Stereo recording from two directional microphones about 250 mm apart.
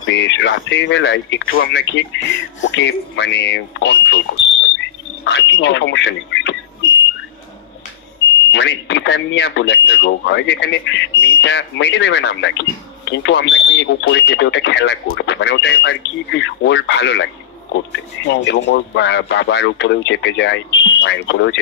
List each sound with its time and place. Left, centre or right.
0.0 s speech: left
4.7 s squawk: left
8.5 s speech: left